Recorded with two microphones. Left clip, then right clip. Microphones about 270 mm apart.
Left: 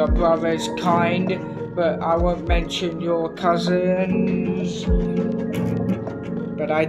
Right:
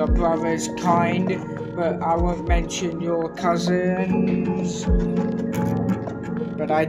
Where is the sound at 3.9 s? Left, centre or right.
Right.